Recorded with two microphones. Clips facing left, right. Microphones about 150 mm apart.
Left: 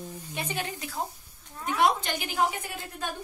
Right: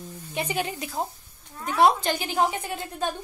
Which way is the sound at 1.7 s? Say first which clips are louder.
Right 5 dB; 35° right (ahead or behind).